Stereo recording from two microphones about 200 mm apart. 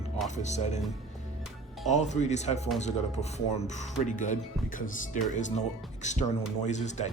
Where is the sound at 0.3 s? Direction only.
35° left (ahead or behind).